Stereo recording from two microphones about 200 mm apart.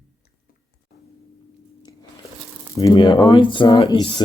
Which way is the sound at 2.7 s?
20° left (ahead or behind).